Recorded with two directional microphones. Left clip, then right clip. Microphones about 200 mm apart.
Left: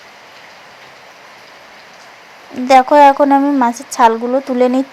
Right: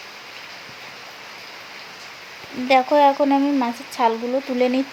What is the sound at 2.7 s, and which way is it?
Speech, 25° left (ahead or behind).